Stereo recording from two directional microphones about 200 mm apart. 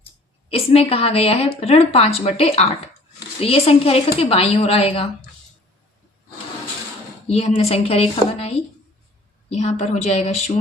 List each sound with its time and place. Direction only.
0.5 s a woman's voice: 30° left (ahead or behind)
7.3 s a woman's voice: 30° left (ahead or behind)